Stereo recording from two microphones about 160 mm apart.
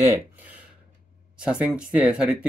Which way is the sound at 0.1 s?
10° right (ahead or behind).